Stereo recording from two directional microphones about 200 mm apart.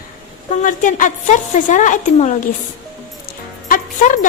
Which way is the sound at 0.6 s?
40° left (ahead or behind).